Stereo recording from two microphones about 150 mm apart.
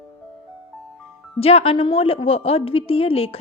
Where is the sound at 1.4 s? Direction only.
40° left (ahead or behind).